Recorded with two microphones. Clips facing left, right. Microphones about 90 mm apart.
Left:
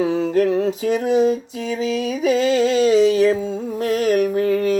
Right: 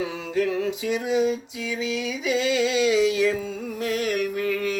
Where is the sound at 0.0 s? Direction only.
35° left (ahead or behind).